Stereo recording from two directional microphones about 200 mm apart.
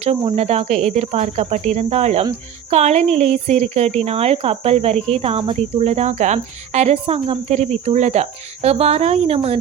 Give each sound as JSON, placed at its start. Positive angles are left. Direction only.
{"t": 0.3, "sound": "speech", "side_deg": -35}